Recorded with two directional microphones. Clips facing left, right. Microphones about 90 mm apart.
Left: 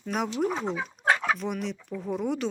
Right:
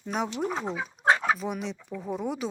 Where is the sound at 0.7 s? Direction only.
30° right (ahead or behind).